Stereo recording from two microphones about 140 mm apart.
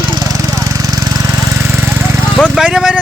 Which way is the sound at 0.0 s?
30° right (ahead or behind).